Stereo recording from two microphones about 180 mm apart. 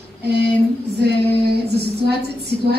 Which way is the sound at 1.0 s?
65° right (ahead or behind).